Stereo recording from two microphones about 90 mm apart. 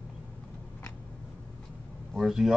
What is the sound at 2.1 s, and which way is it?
Vehicle, centre (ahead or behind).